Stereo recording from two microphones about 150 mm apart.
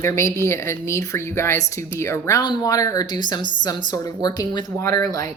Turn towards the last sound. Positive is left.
turn(degrees=25)  # may be behind; listen again after turning